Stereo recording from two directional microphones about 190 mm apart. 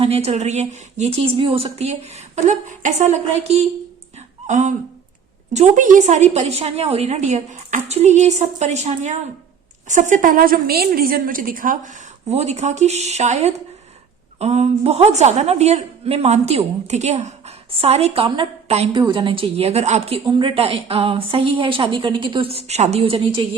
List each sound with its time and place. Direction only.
0.0 s a woman's voice: 30° right (ahead or behind)